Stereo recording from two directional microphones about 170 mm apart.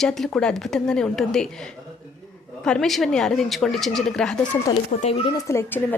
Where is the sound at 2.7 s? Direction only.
Centre (ahead or behind).